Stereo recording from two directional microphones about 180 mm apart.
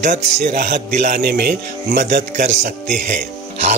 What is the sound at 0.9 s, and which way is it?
Speech, 40° right (ahead or behind).